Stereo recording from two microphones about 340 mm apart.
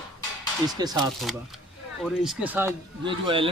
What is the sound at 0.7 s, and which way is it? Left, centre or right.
Speech, centre.